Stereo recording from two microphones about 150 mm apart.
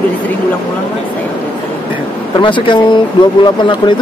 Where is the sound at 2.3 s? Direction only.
35° left (ahead or behind).